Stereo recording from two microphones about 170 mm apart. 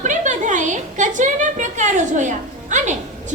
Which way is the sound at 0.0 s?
45° right (ahead or behind).